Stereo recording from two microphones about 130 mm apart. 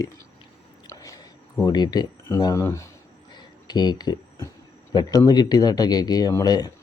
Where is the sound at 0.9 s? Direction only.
30° left (ahead or behind).